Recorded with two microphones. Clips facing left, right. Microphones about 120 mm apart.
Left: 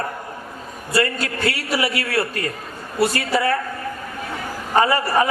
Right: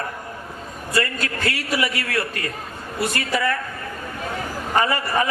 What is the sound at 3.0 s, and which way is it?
Speech, 40° left (ahead or behind).